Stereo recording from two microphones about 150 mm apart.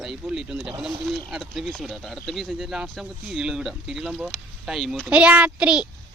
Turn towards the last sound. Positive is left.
turn(degrees=-5)  # may be behind; listen again after turning